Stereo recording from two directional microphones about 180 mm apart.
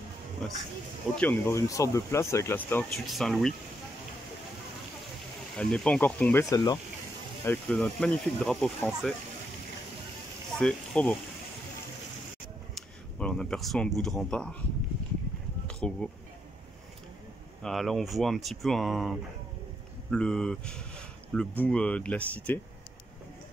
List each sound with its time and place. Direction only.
1.1 s speech: 10° left (ahead or behind)
3.1 s speech: centre (ahead or behind)
5.6 s speech: 5° left (ahead or behind)
6.5 s speech: 20° left (ahead or behind)
7.4 s speech: 5° left (ahead or behind)
10.6 s speech: 5° left (ahead or behind)
12.7 s speech: 5° left (ahead or behind)
15.6 s bee: 5° left (ahead or behind)
17.6 s speech: centre (ahead or behind)